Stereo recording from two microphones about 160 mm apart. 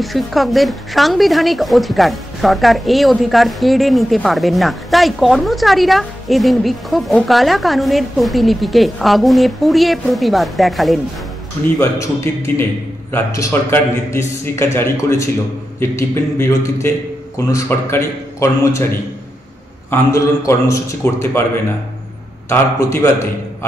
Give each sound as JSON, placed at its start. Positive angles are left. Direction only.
{"t": 0.0, "sound": "speech", "side_deg": 0}
{"t": 11.6, "sound": "a man's voice", "side_deg": 15}
{"t": 22.5, "sound": "a man's voice", "side_deg": 20}